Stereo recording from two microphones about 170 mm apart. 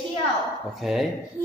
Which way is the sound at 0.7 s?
Centre (ahead or behind).